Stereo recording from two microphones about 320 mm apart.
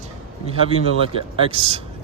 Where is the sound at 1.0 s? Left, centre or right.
Centre.